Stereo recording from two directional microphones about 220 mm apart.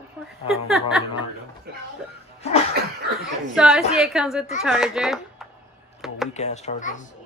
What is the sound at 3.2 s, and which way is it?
A woman's voice, centre (ahead or behind).